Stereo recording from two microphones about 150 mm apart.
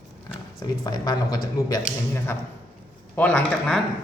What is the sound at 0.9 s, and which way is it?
Speech, 25° left (ahead or behind).